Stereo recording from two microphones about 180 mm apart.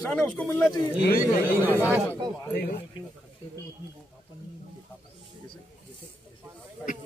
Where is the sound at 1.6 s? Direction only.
10° right (ahead or behind).